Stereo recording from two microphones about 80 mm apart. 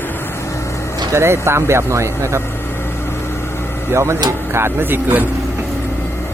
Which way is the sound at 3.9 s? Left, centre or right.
Right.